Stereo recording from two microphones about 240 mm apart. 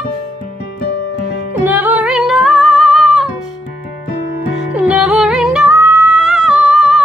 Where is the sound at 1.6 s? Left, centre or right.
Centre.